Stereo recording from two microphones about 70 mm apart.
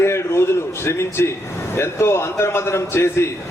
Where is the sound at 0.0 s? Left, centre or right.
Left.